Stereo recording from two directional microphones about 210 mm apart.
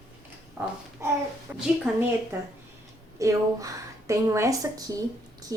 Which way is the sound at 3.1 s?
15° right (ahead or behind).